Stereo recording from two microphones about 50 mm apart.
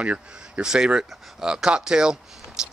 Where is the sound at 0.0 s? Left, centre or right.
Right.